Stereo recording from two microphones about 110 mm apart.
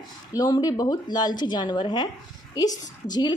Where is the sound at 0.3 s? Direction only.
35° left (ahead or behind).